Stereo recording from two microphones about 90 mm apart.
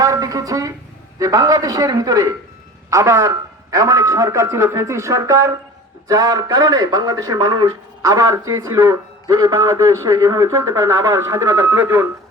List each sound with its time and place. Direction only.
0.0 s a man's voice: 40° right (ahead or behind)
8.0 s a man's voice: 35° right (ahead or behind)